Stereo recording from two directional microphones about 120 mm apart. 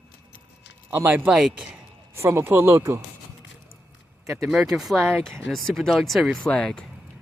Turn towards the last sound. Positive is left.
turn(degrees=10)  # may be behind; listen again after turning